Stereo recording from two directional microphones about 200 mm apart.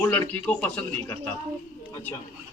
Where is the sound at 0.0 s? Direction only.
10° left (ahead or behind).